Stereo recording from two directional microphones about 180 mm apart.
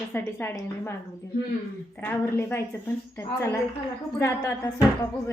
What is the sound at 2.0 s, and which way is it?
Speech, 10° left (ahead or behind).